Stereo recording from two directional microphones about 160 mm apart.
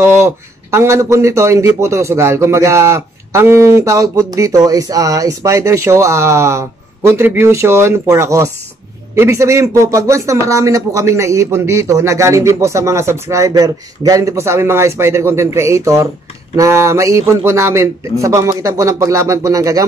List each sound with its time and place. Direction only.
0.0 s speech: 15° right (ahead or behind)